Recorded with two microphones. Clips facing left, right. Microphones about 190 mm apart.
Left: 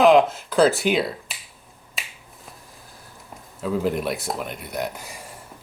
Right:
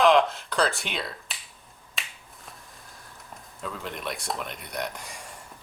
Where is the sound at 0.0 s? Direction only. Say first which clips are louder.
Left 5 dB; 5° left (ahead or behind).